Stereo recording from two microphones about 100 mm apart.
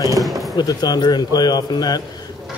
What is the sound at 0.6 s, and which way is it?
Speech, 45° left (ahead or behind).